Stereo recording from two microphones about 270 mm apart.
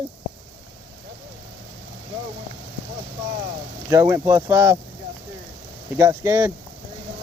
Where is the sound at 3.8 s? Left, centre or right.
Centre.